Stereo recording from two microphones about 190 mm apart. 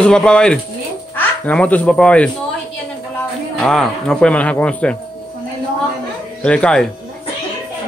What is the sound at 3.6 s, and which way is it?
A man's voice, 5° left (ahead or behind).